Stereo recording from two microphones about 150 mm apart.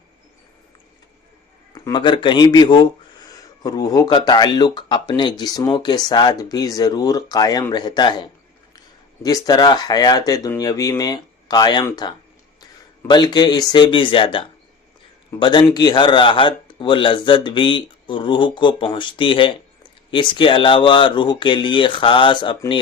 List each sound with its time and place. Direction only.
1.7 s speech: 30° left (ahead or behind)